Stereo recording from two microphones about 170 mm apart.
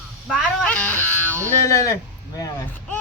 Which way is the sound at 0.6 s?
10° left (ahead or behind).